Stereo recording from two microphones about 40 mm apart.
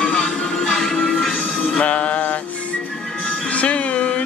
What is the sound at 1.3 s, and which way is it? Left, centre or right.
Music, left.